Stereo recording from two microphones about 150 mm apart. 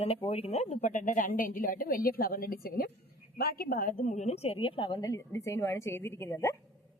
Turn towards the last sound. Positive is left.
turn(degrees=20)  # may be behind; listen again after turning